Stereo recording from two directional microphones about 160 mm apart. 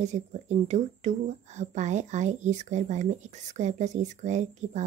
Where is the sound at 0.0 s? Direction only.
45° right (ahead or behind).